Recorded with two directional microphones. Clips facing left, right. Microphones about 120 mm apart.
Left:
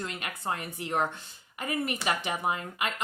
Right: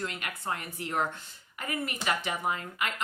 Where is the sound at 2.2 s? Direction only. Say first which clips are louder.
Left 1 dB; 20° left (ahead or behind).